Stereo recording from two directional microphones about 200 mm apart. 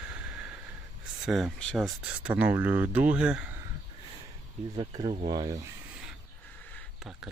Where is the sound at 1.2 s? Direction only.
Centre (ahead or behind).